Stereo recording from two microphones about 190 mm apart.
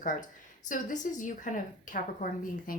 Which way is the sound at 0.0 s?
45° left (ahead or behind).